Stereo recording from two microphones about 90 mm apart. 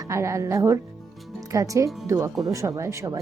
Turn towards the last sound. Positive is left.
turn(degrees=-35)  # may be behind; listen again after turning